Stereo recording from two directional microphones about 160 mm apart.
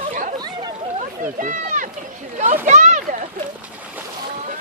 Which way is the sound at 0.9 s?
55° right (ahead or behind).